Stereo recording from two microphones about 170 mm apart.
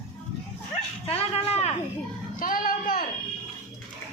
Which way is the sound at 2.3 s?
55° left (ahead or behind).